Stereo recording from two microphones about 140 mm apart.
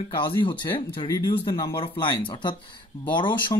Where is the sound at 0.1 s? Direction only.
35° left (ahead or behind).